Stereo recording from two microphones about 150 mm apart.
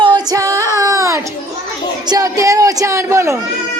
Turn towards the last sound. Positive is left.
turn(degrees=-20)  # may be behind; listen again after turning